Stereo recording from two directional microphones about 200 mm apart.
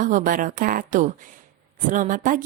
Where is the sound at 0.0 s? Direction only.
40° right (ahead or behind).